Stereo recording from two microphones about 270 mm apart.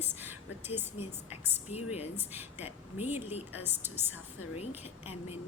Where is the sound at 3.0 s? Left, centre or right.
Left.